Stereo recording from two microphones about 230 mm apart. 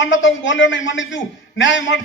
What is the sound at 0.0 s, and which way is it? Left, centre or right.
A man's voice, left.